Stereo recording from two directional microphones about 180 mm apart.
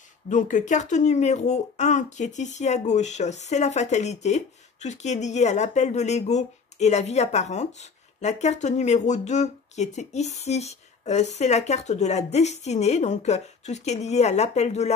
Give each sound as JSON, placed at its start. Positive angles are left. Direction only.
{"t": 0.3, "sound": "speech", "side_deg": 45}